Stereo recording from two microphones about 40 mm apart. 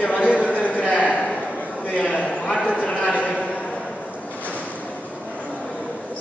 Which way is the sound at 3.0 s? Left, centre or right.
Left.